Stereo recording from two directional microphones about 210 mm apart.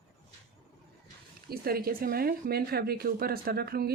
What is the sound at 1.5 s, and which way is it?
Speech, 45° right (ahead or behind).